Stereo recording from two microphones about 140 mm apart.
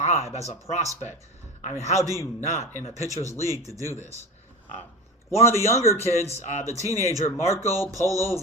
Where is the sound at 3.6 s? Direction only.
25° right (ahead or behind).